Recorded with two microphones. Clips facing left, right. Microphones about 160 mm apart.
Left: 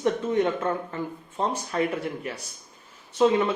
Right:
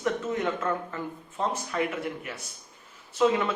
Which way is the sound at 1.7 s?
30° left (ahead or behind).